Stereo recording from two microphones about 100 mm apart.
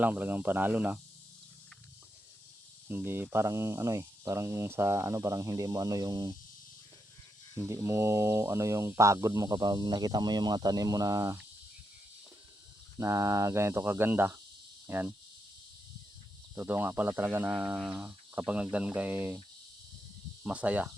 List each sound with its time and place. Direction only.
0.0 s speech: 20° right (ahead or behind)
2.9 s speech: 20° right (ahead or behind); by 6.3 s 35° right (ahead or behind)
7.6 s speech: 30° right (ahead or behind)
13.0 s speech: 30° right (ahead or behind)
16.6 s speech: 20° right (ahead or behind)
17.5 s speech: 10° right (ahead or behind)
20.4 s speech: 15° right (ahead or behind)